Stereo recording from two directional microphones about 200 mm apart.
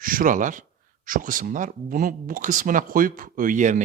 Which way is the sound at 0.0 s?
45° right (ahead or behind).